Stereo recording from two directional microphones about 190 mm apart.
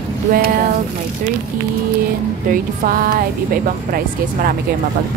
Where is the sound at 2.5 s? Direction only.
45° right (ahead or behind).